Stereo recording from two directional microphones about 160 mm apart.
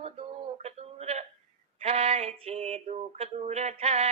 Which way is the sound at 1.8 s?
40° right (ahead or behind).